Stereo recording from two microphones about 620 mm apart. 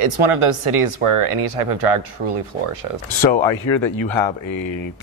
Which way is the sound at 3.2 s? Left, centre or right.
Left.